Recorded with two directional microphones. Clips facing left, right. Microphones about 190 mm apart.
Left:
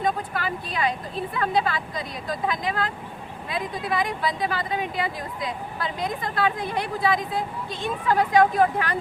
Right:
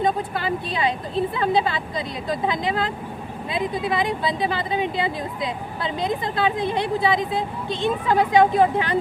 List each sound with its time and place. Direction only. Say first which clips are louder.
0.0 s speech: right 3 dB; 25° right (ahead or behind)